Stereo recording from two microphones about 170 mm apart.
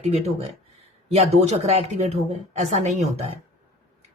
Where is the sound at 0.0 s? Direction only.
40° right (ahead or behind).